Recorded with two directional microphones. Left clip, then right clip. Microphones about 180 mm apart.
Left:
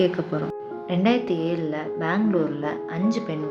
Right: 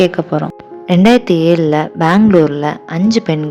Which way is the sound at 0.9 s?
65° right (ahead or behind).